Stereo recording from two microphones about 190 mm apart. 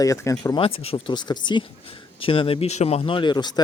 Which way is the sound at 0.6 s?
30° left (ahead or behind).